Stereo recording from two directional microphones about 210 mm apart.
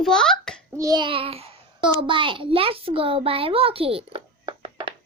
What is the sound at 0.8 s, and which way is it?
A child's voice, 20° right (ahead or behind).